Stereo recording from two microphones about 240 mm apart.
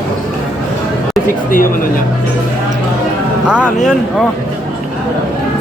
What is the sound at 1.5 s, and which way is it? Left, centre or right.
Speech, left.